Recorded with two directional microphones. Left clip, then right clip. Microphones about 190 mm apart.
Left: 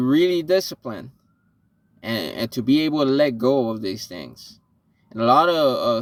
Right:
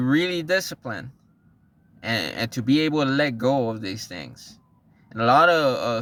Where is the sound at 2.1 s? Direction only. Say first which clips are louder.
Even; 5° right (ahead or behind).